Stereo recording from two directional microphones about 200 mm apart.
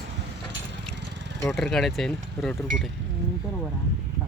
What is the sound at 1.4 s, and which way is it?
Speech, centre (ahead or behind).